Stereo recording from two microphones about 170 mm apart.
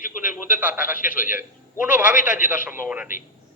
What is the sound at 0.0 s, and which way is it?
Speech, 50° left (ahead or behind).